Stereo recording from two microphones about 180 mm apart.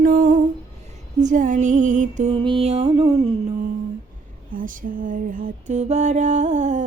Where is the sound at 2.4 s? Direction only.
30° right (ahead or behind).